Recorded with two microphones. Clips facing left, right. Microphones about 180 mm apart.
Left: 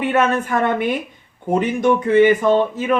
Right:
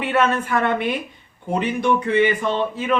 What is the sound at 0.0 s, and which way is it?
Speech, 45° left (ahead or behind).